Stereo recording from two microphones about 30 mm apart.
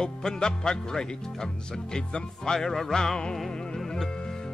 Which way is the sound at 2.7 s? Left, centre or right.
Centre.